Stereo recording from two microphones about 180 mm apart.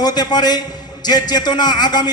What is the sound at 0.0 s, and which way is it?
A man's voice, 20° left (ahead or behind).